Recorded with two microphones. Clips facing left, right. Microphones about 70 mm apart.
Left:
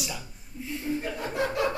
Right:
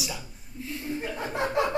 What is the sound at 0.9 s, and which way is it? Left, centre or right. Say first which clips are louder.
Chuckle: right 1 dB; right.